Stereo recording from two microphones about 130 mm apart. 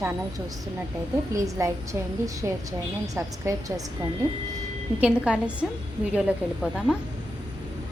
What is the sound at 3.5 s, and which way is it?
Speech, 20° right (ahead or behind).